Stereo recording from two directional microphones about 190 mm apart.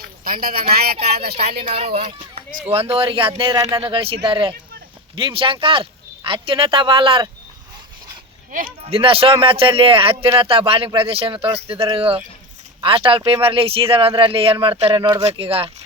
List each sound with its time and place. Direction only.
0.3 s speech: 50° right (ahead or behind)
1.7 s speech: 30° right (ahead or behind)
8.8 s speech: 30° right (ahead or behind)